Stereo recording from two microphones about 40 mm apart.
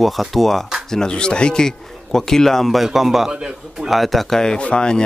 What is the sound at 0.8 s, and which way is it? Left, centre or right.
Speech, centre.